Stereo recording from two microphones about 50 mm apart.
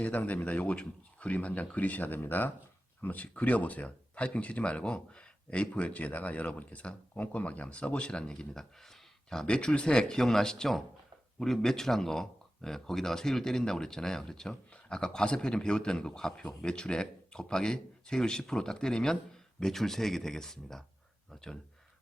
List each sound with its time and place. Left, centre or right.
0.0 s speech: left; by 20.8 s centre